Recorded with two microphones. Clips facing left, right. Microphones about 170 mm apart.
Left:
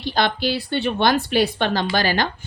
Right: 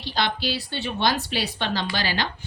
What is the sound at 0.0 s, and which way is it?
Speech, 50° left (ahead or behind).